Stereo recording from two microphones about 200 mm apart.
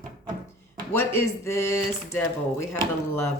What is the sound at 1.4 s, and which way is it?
Speech, 15° left (ahead or behind).